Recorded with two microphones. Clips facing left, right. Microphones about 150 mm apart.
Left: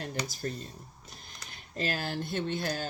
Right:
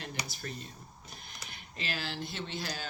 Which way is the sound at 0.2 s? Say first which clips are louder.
Left 6 dB; 10° right (ahead or behind).